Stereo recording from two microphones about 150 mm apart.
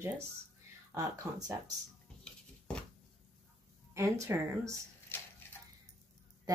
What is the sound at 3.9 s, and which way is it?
Speech, 20° right (ahead or behind).